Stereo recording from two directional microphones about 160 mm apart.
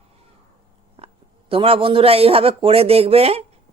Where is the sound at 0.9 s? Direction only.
35° right (ahead or behind).